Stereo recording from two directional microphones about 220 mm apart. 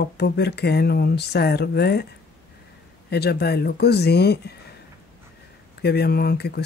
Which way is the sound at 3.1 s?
45° left (ahead or behind).